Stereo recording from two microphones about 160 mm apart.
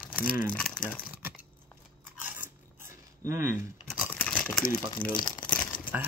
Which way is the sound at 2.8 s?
15° right (ahead or behind).